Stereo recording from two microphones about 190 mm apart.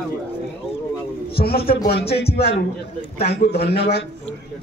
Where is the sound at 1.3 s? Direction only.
55° left (ahead or behind).